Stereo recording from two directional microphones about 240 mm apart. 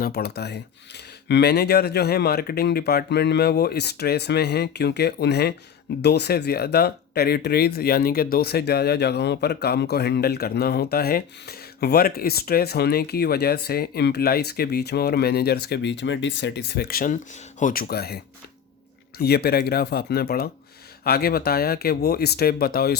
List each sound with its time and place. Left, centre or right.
0.0 s speech: left
19.2 s speech: left